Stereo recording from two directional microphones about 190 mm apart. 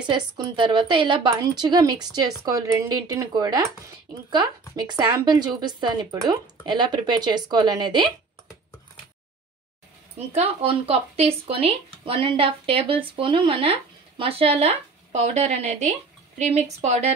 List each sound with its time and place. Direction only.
0.0 s speech: 25° right (ahead or behind)
10.1 s a woman's voice: 35° right (ahead or behind)